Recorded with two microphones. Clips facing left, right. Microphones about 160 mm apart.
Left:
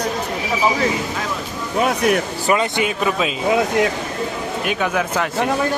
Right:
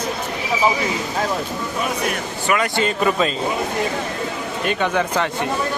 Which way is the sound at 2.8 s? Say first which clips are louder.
Right 1 dB; 5° left (ahead or behind).